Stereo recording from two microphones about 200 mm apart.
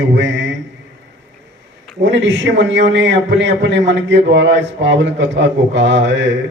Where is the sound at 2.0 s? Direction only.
65° right (ahead or behind).